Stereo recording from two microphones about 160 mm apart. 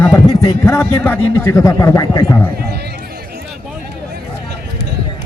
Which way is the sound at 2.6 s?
85° right.